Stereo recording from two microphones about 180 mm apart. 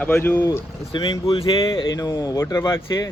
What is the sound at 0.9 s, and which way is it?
Speech, 25° left (ahead or behind).